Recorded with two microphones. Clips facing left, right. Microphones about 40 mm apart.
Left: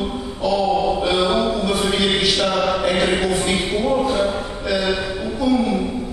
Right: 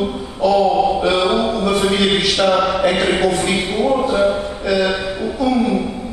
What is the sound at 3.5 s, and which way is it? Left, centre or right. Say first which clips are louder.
Speech: right 2 dB; centre.